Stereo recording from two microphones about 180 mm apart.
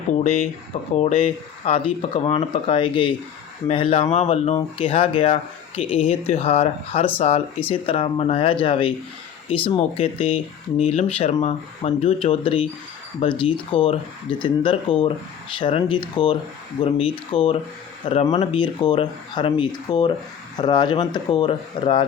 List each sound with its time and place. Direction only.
0.9 s speech: 35° left (ahead or behind)